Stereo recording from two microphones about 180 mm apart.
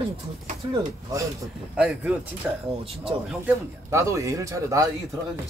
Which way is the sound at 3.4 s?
15° right (ahead or behind).